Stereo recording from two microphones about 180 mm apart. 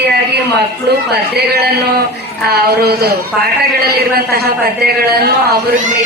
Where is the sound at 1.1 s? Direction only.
65° right (ahead or behind).